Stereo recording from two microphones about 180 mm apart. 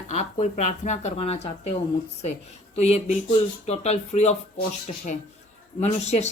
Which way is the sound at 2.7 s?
35° left (ahead or behind).